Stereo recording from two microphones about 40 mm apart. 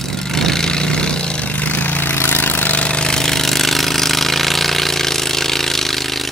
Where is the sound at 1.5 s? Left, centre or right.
Left.